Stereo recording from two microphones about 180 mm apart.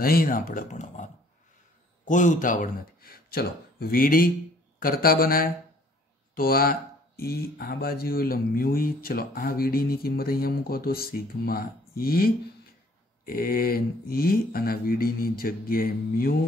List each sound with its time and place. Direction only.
0.0 s speech: 55° left (ahead or behind)